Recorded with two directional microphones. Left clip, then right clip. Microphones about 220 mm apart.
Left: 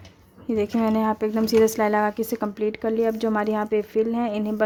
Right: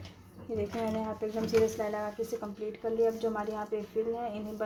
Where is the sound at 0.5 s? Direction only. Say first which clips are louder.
Left 10 dB; 40° left (ahead or behind).